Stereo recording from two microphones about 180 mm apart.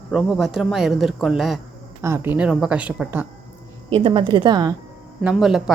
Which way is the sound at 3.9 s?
30° right (ahead or behind).